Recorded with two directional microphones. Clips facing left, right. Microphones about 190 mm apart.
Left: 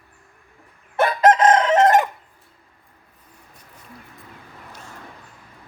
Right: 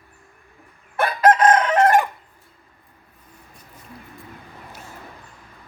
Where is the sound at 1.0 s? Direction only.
25° left (ahead or behind).